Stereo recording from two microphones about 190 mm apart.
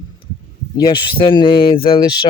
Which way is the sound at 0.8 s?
20° left (ahead or behind).